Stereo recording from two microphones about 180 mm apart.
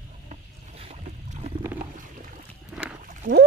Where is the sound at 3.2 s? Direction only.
50° right (ahead or behind).